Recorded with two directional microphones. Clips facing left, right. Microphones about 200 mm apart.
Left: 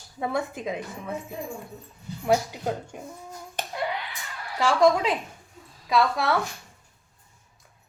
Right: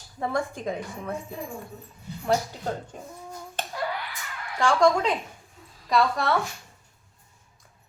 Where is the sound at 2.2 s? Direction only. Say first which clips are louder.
Left 2 dB; 10° left (ahead or behind).